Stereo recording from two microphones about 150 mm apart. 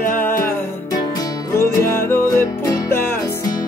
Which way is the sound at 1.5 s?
15° left (ahead or behind).